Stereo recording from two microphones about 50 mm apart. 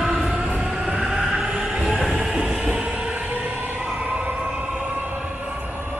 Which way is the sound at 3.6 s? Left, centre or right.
Right.